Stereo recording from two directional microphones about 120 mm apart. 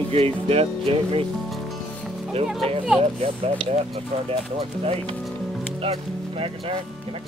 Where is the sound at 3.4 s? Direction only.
55° right (ahead or behind).